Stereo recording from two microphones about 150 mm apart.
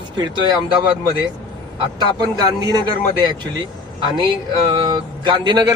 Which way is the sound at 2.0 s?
30° right (ahead or behind).